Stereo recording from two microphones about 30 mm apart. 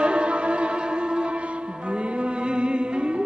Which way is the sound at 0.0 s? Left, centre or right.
Right.